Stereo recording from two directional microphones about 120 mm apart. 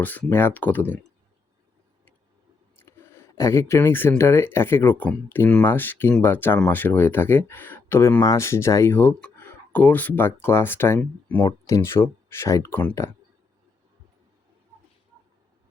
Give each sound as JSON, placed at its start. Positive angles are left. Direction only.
{"t": 0.0, "sound": "speech", "side_deg": 15}
{"t": 2.7, "sound": "a sound", "side_deg": 20}
{"t": 4.2, "sound": "speech", "side_deg": 20}
{"t": 11.4, "sound": "speech", "side_deg": 25}